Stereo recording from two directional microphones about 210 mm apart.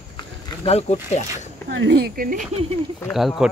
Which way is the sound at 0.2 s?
30° left (ahead or behind).